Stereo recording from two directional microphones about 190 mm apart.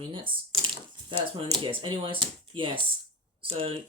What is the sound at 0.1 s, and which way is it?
Speech, 25° right (ahead or behind).